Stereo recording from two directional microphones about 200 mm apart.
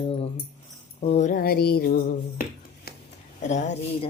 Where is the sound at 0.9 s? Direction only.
30° left (ahead or behind).